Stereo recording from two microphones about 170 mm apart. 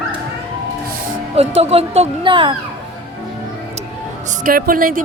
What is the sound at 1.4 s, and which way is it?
Speech, 35° right (ahead or behind).